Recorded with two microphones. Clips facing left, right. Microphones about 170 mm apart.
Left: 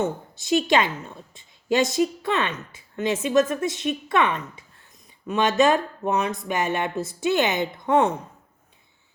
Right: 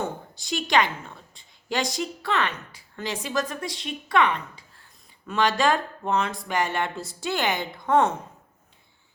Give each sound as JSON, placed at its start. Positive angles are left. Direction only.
{"t": 0.0, "sound": "a woman's voice", "side_deg": 25}